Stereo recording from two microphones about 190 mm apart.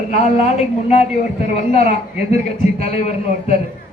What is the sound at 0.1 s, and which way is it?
A man's voice, 35° left (ahead or behind).